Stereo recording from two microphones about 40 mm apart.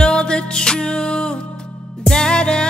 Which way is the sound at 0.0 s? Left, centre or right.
Left.